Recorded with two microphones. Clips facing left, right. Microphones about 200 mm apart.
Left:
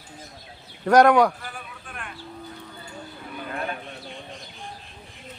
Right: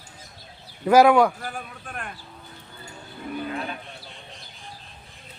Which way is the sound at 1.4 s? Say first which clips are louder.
Right 4 dB; 45° right (ahead or behind).